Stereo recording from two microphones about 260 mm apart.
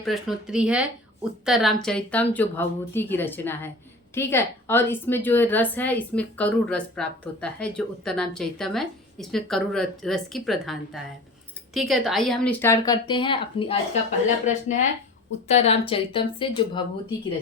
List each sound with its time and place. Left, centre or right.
0.0 s a woman's voice: centre